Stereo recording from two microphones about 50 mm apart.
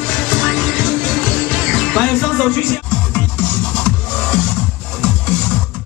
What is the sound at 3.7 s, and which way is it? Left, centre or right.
Music, left.